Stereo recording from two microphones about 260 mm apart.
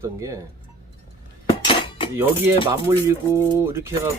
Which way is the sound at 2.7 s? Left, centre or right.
Centre.